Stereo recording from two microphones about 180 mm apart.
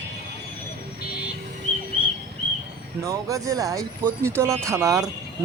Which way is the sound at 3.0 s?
20° right (ahead or behind).